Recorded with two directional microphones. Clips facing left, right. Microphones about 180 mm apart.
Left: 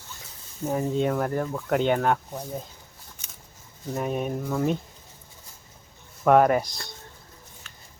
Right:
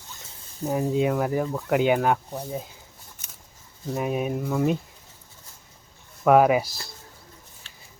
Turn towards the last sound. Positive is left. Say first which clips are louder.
# left 1 dB
turn(degrees=-30)  # may be behind; listen again after turning